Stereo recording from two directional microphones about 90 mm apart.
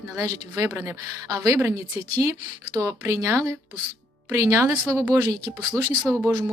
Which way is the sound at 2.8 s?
35° right (ahead or behind).